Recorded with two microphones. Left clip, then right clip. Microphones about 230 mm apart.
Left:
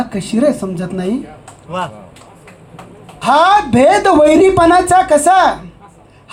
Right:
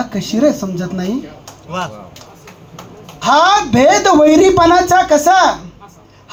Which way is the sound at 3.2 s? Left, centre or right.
Left.